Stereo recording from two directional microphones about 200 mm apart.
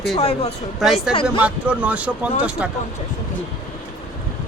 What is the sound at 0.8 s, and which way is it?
Speech, centre (ahead or behind).